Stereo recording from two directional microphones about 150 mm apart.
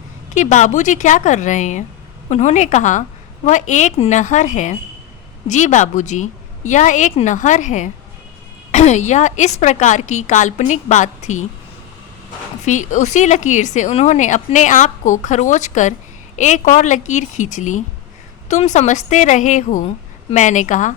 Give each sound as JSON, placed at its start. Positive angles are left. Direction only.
{"t": 0.3, "sound": "a woman's voice", "side_deg": 55}
{"t": 12.6, "sound": "speech", "side_deg": 55}